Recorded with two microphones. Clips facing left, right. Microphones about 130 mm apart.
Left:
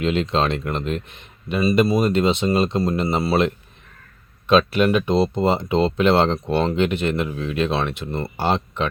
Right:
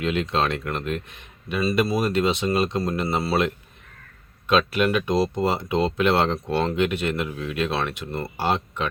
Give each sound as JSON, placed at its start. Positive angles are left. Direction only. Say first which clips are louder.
{"t": 0.0, "sound": "speech", "louder": "left 3 dB", "side_deg": 25}